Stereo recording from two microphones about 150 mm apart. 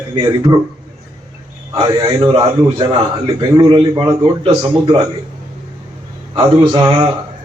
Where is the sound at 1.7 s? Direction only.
30° right (ahead or behind).